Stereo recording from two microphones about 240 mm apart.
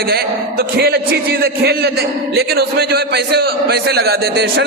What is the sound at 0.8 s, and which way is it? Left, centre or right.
A man's voice, right.